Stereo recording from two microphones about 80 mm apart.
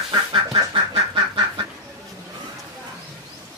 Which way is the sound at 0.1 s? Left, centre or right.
Right.